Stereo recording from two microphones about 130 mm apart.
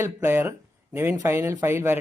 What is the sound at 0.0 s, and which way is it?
Speech, 20° right (ahead or behind).